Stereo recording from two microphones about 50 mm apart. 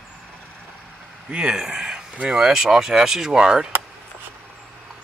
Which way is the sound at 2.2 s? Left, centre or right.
Centre.